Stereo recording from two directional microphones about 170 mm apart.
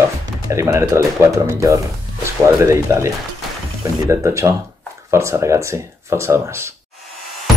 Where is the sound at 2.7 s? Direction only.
15° right (ahead or behind).